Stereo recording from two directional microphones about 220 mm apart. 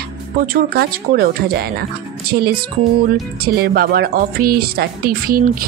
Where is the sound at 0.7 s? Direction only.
45° right (ahead or behind).